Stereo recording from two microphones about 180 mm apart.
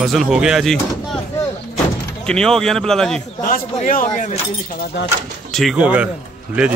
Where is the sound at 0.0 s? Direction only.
Centre (ahead or behind).